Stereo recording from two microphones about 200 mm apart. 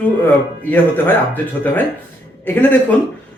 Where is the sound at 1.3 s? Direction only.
10° left (ahead or behind).